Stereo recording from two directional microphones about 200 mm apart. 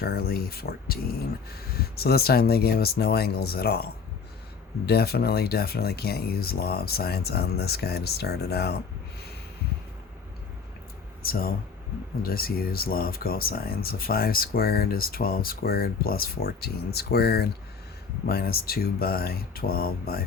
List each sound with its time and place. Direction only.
0.0 s speech: 50° left (ahead or behind)
4.9 s speech: 50° left (ahead or behind)
11.2 s speech: 50° left (ahead or behind)